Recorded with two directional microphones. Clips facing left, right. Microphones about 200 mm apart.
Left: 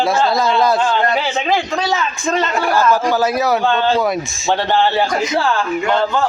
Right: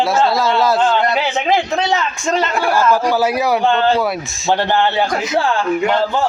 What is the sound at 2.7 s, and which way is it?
A man's voice, 10° right (ahead or behind).